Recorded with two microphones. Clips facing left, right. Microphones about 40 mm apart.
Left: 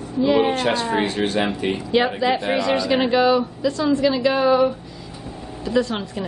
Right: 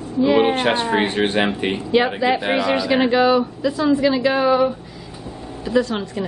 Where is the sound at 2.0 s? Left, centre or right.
Centre.